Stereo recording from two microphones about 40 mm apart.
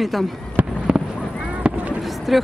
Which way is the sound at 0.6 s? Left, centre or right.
Right.